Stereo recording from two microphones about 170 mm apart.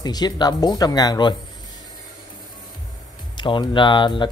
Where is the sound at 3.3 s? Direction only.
25° left (ahead or behind).